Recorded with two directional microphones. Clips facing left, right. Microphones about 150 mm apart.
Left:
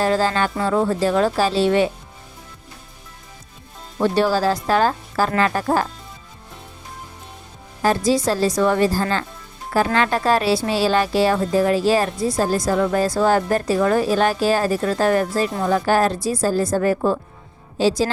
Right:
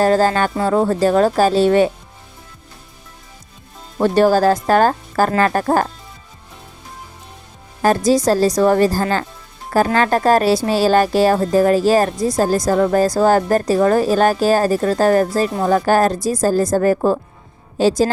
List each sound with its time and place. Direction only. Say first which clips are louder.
0.0 s a woman's voice: right 4 dB; 45° right (ahead or behind)
3.9 s a woman's voice: right 5 dB; 45° right (ahead or behind)
7.8 s a woman's voice: right 4 dB; 45° right (ahead or behind)